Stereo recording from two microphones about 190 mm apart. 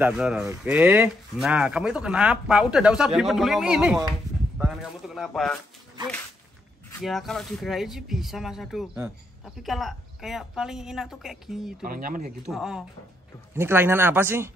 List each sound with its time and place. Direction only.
0.0 s speech: 5° right (ahead or behind)
7.0 s speech: centre (ahead or behind)
11.8 s speech: 45° right (ahead or behind)
12.4 s speech: centre (ahead or behind)
13.6 s speech: 10° right (ahead or behind)